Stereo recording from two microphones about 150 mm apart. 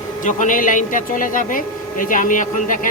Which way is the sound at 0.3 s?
60° left (ahead or behind).